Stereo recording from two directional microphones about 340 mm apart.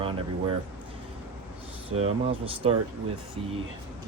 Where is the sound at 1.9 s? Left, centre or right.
Centre.